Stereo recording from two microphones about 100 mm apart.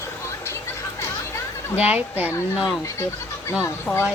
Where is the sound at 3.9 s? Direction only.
5° left (ahead or behind).